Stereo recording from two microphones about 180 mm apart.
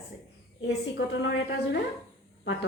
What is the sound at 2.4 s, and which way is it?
Speech, 90° left.